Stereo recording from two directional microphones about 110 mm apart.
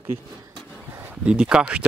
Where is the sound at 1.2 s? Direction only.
10° right (ahead or behind).